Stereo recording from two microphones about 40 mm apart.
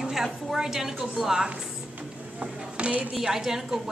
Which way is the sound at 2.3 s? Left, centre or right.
Right.